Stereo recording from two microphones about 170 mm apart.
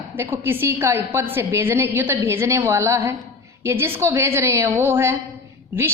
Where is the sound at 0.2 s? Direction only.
15° right (ahead or behind).